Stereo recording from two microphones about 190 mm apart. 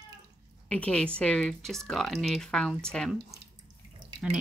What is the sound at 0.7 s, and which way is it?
Speech, 5° left (ahead or behind).